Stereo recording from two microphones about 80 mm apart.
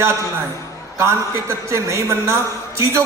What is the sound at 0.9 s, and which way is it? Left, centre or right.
A man's voice, right.